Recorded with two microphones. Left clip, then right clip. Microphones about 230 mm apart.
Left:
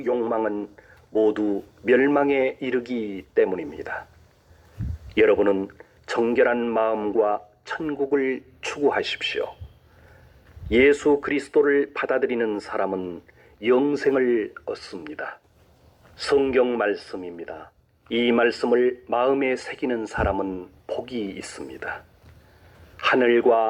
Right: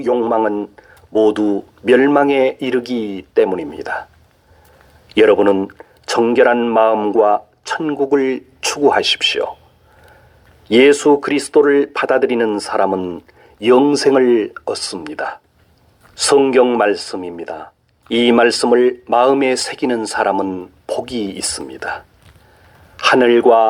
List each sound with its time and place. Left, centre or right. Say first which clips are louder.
0.0 s speech: right 8 dB; right
5.0 s speech: right 7 dB; right
10.7 s speech: right 8 dB; right